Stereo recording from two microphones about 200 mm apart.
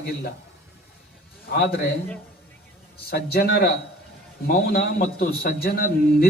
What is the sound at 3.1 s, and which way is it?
A man's voice, 50° left (ahead or behind).